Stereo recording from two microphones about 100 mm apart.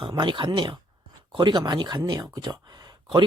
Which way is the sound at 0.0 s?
50° right (ahead or behind).